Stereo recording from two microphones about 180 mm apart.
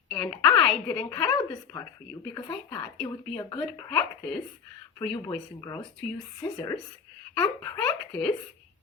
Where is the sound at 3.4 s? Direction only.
20° left (ahead or behind).